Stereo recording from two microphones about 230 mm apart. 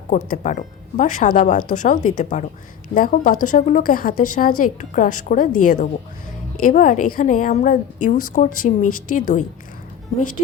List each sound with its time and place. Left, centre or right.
0.1 s speech: left